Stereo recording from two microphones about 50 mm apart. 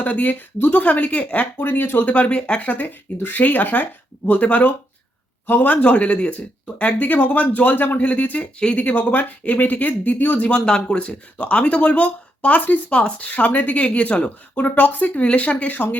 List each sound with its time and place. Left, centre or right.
0.0 s speech: left
0.9 s speech: left
2.0 s speech: left
10.7 s speech: centre; by 16.0 s left